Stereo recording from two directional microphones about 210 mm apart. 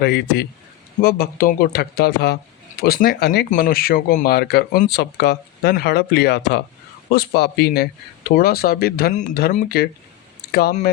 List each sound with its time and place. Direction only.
0.0 s speech: 50° left (ahead or behind)